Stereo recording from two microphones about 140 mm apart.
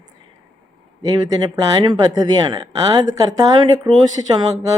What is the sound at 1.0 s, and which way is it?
Speech, 30° right (ahead or behind).